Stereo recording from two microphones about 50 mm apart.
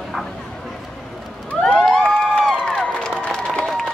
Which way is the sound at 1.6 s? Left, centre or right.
Centre.